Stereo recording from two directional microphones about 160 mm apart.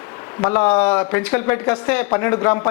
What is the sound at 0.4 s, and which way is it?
A man's voice, 10° left (ahead or behind).